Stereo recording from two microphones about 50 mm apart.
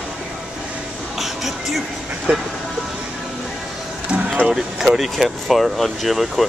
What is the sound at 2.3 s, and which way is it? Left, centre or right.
Speech, right.